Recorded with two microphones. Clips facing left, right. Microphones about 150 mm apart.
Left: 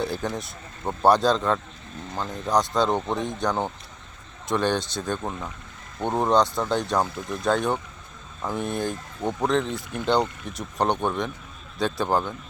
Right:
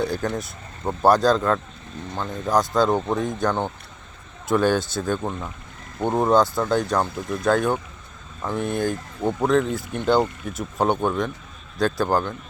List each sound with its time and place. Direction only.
0.0 s speech: centre (ahead or behind)